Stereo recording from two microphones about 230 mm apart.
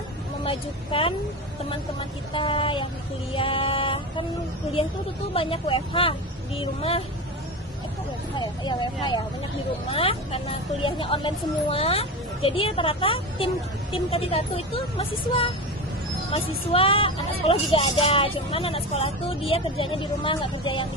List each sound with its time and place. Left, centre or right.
0.4 s speech: left
5.3 s speech: left
8.4 s speech: centre